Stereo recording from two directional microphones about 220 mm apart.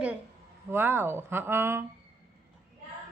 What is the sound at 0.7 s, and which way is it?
Speech, 10° right (ahead or behind).